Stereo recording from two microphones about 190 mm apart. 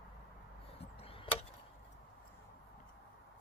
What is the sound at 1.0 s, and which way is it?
Tick-tock, 30° left (ahead or behind).